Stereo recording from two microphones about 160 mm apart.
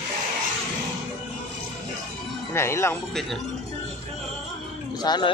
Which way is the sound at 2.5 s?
15° left (ahead or behind).